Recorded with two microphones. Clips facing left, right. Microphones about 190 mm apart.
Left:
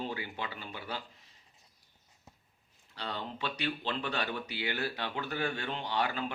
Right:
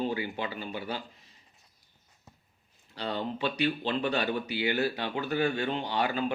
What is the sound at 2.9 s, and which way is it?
Speech, 10° right (ahead or behind).